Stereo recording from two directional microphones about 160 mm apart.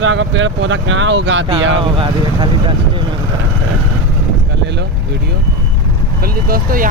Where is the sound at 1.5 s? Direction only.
30° right (ahead or behind).